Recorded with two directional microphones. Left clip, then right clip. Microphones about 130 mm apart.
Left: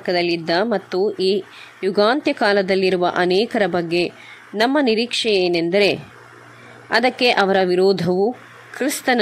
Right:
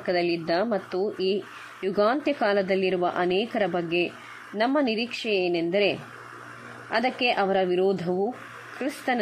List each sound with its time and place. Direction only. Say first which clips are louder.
0.0 s a woman's voice: left 6 dB; 20° left (ahead or behind)